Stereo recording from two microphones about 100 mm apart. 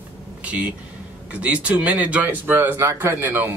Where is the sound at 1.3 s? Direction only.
15° right (ahead or behind).